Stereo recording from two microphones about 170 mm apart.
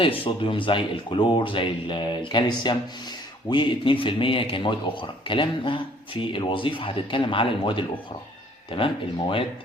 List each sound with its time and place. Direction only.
0.0 s speech: 30° left (ahead or behind)